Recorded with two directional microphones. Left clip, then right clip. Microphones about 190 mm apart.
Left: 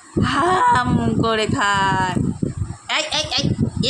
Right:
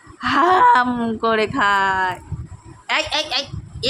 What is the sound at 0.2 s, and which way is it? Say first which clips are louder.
A man's voice: right 3 dB; 10° right (ahead or behind).